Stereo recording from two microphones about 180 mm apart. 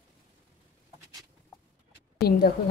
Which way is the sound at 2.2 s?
60° left (ahead or behind).